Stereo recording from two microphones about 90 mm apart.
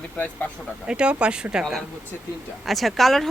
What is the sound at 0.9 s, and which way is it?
Speech, 10° right (ahead or behind).